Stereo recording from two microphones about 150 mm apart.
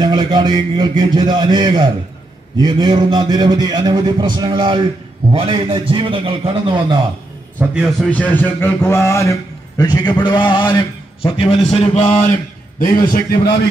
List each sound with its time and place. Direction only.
0.0 s a man's voice: 25° right (ahead or behind)
7.5 s a man's voice: 5° right (ahead or behind)
8.1 s a man's voice: 10° left (ahead or behind); by 11.4 s 30° left (ahead or behind)
11.4 s a sound: 45° left (ahead or behind)
12.7 s a man's voice: 65° left (ahead or behind)
13.1 s a man's voice: 80° left